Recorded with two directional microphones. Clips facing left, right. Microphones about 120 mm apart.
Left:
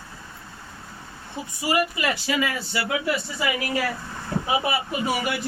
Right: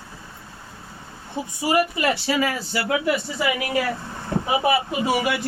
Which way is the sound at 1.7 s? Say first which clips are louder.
Right 3 dB; 30° right (ahead or behind).